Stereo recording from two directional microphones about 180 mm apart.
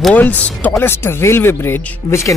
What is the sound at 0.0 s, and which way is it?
Speech, 10° left (ahead or behind).